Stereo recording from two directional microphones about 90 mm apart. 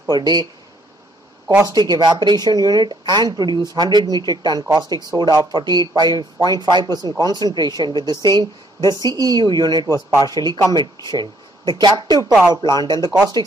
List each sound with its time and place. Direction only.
0.1 s speech: 50° right (ahead or behind)
1.6 s speech: 45° right (ahead or behind)
12.3 s speech: 10° right (ahead or behind)
12.6 s speech: 50° right (ahead or behind)